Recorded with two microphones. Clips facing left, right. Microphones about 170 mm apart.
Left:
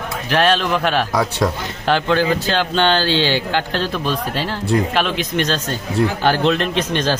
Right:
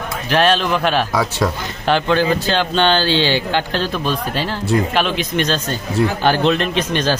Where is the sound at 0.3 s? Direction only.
20° right (ahead or behind).